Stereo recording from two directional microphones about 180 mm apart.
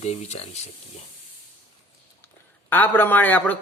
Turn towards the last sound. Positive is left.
turn(degrees=10)  # may be behind; listen again after turning